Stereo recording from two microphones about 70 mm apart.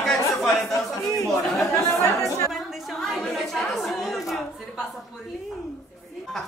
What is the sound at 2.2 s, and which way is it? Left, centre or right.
Chatter, left.